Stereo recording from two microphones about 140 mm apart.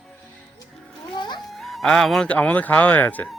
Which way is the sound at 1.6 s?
Centre (ahead or behind).